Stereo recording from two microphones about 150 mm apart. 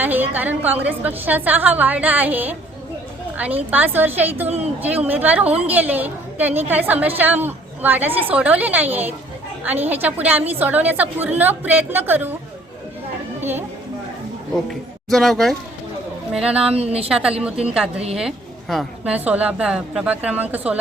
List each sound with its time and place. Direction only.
0.0 s a woman's voice: 10° right (ahead or behind)
13.4 s speech: 15° right (ahead or behind)
14.5 s speech: centre (ahead or behind)
16.7 s a woman's voice: 40° right (ahead or behind)
17.1 s a woman's voice: 5° right (ahead or behind)